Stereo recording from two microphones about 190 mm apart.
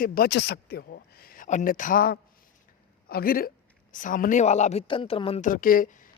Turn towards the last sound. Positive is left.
turn(degrees=45)  # may be behind; listen again after turning